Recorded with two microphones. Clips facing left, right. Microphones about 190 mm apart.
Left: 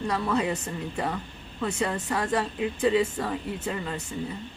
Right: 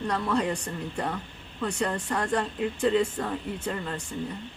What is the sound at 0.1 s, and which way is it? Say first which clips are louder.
A woman's voice: even; 5° left (ahead or behind).